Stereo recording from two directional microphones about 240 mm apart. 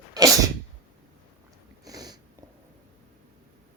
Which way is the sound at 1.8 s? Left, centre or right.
Centre.